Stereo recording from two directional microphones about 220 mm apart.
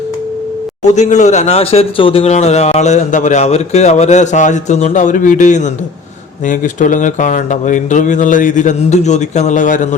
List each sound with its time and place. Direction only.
0.9 s a man's voice: 30° left (ahead or behind)